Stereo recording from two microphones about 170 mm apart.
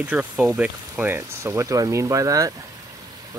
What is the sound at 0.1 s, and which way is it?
Speech, 10° right (ahead or behind).